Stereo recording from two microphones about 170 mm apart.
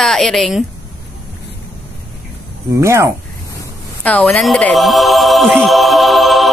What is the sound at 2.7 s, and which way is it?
Speech, 15° right (ahead or behind).